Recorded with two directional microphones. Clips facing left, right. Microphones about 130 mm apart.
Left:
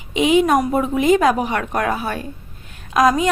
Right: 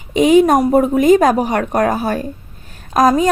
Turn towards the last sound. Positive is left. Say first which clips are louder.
# right 3 dB
turn(degrees=-40)  # may be behind; listen again after turning